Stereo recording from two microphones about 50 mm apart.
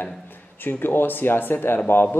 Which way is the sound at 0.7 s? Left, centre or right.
Left.